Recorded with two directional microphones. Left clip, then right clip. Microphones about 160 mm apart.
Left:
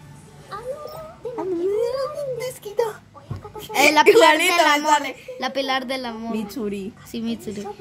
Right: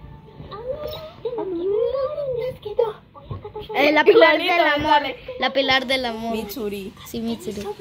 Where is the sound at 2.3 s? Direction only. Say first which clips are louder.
Right 2 dB; 90° left.